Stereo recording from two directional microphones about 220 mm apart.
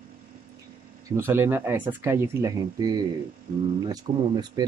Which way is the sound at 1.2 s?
10° right (ahead or behind).